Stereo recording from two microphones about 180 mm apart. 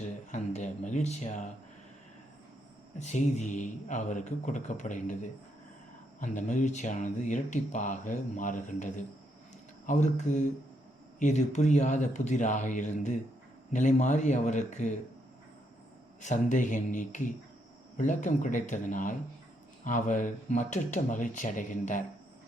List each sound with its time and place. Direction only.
0.3 s speech: 40° left (ahead or behind)
3.0 s speech: 40° left (ahead or behind)
6.1 s speech: 45° left (ahead or behind)
16.2 s speech: 45° left (ahead or behind)